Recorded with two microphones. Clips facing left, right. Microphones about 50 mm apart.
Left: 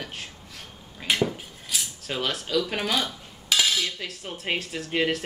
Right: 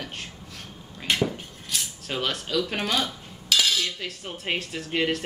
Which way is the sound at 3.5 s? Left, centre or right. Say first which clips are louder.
Even; centre.